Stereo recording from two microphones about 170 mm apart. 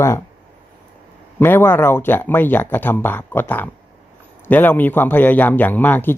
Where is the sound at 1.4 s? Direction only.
15° left (ahead or behind).